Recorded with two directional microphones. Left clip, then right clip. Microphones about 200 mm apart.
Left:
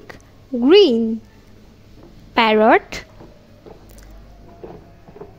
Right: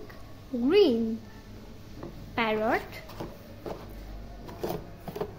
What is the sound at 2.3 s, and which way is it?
Speech, 45° left (ahead or behind).